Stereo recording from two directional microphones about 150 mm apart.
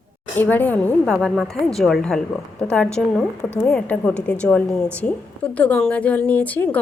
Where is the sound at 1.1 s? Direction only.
5° right (ahead or behind).